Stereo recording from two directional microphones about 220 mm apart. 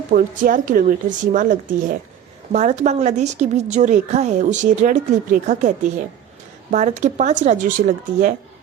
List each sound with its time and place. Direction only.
0.1 s a woman's voice: 40° right (ahead or behind)